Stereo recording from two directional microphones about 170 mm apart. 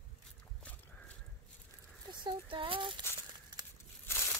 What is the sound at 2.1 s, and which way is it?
Speech, 30° right (ahead or behind).